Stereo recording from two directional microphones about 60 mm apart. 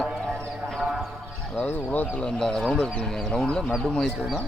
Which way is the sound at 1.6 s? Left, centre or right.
Left.